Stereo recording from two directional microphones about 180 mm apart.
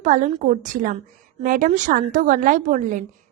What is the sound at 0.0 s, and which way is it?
A woman's voice, 45° right (ahead or behind).